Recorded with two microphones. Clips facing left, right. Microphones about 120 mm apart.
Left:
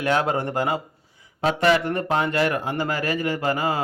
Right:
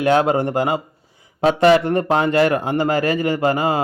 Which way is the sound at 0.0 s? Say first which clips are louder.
Right 6 dB; 20° right (ahead or behind).